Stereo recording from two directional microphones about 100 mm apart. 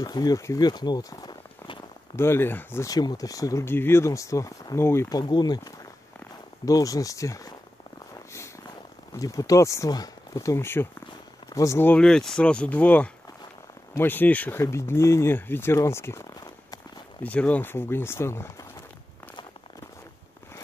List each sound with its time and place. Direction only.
0.0 s speech: 40° left (ahead or behind)
2.1 s speech: 25° left (ahead or behind)
2.9 s speech: 40° left (ahead or behind)
5.1 s speech: 45° left (ahead or behind)
9.1 s speech: 35° left (ahead or behind)
12.0 s speech: 5° left (ahead or behind)
14.6 s speech: 30° left (ahead or behind)
17.2 s speech: 15° left (ahead or behind)